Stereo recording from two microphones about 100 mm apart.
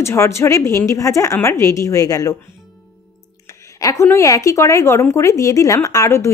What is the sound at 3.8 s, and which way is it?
Speech, 30° left (ahead or behind).